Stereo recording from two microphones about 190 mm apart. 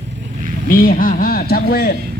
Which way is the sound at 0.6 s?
50° left (ahead or behind).